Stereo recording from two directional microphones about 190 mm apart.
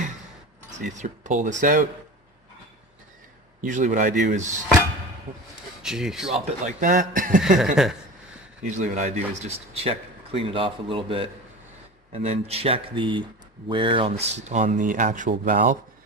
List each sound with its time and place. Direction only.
0.9 s speech: 40° right (ahead or behind)
3.6 s speech: 40° right (ahead or behind)
5.8 s speech: centre (ahead or behind)
6.3 s speech: 40° right (ahead or behind)
7.8 s speech: centre (ahead or behind)
8.7 s speech: 40° right (ahead or behind)